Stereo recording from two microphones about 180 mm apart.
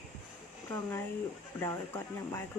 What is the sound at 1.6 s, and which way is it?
Speech, 15° left (ahead or behind).